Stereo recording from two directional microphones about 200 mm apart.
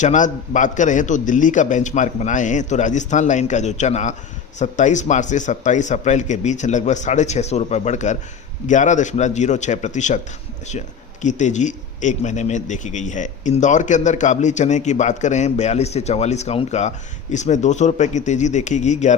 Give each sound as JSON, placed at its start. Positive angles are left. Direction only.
{"t": 0.0, "sound": "speech", "side_deg": 40}